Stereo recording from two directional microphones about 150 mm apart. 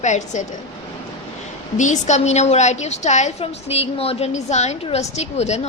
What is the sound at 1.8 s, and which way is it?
A woman's voice, 50° left (ahead or behind).